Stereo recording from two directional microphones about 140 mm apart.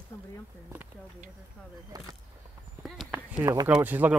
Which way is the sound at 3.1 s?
10° right (ahead or behind).